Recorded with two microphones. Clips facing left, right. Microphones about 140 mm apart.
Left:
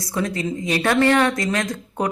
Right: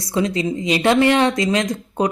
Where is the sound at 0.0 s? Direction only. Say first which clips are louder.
Right 4 dB; 20° right (ahead or behind).